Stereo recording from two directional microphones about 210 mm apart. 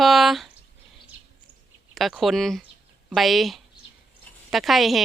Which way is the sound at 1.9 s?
Centre (ahead or behind).